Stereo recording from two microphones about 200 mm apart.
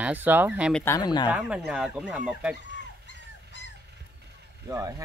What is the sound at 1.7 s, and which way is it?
Speech, 5° right (ahead or behind).